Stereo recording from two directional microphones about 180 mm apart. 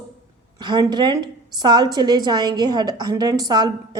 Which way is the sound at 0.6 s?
25° right (ahead or behind).